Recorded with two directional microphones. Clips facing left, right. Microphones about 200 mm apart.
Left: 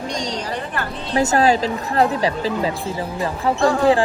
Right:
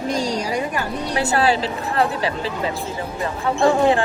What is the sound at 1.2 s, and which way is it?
A woman's voice, 40° left (ahead or behind).